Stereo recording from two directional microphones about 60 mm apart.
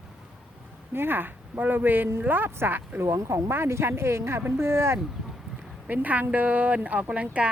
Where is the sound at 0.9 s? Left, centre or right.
Right.